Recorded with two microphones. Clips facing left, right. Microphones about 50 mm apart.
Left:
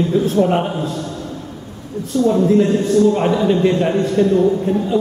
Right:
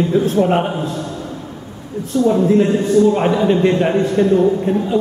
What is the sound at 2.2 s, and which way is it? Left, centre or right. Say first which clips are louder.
A man's voice: even; centre.